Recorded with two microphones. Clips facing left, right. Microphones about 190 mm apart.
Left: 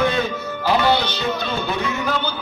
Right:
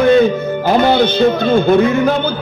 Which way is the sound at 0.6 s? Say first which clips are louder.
Right 6 dB; 50° right (ahead or behind).